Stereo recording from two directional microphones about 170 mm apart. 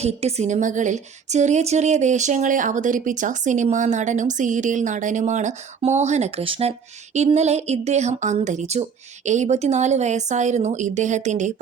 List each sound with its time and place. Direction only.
0.0 s a woman's voice: 40° right (ahead or behind)